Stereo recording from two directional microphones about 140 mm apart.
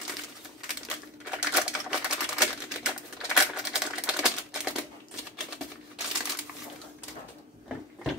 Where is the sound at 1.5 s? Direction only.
5° right (ahead or behind).